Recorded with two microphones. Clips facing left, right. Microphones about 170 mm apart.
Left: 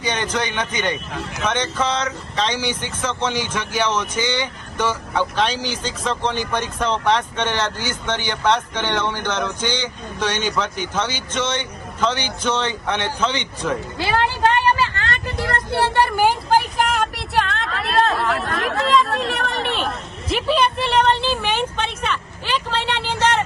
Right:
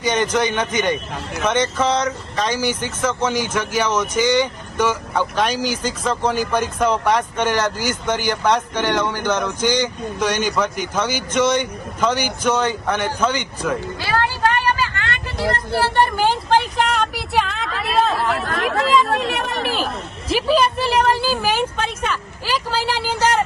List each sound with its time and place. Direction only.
0.1 s speech: 15° right (ahead or behind)
14.0 s vehicle: 20° left (ahead or behind)
16.5 s a woman's voice: 5° left (ahead or behind)